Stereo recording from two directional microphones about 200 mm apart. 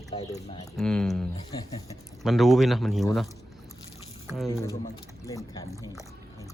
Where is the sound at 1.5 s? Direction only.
20° left (ahead or behind).